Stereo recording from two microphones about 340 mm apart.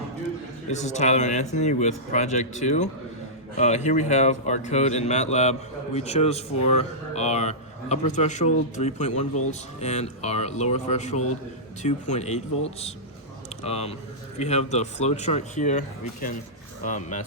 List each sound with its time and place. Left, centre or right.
0.7 s a man's voice: left
16.8 s speech: left